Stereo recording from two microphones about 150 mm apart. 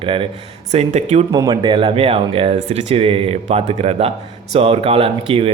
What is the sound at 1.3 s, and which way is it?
Speech, 30° right (ahead or behind).